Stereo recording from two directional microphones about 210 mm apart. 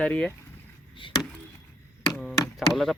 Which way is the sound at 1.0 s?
25° left (ahead or behind).